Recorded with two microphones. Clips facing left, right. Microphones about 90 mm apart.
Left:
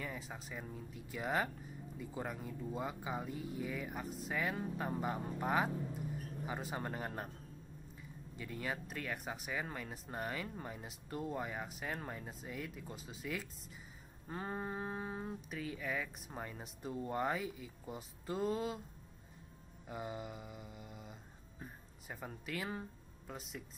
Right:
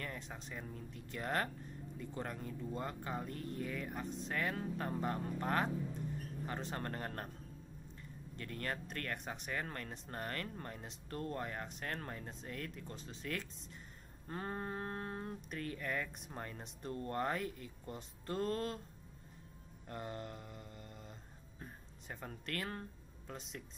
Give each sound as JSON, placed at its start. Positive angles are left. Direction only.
{"t": 0.0, "sound": "speech", "side_deg": 5}
{"t": 19.9, "sound": "speech", "side_deg": 5}